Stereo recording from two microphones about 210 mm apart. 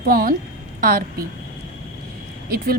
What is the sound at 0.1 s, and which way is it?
Speech, 45° right (ahead or behind).